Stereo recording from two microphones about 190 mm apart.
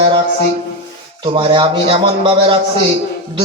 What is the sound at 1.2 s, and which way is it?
A man's voice, 25° right (ahead or behind).